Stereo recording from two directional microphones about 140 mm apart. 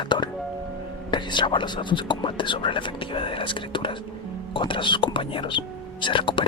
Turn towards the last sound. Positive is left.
turn(degrees=35)  # may be behind; listen again after turning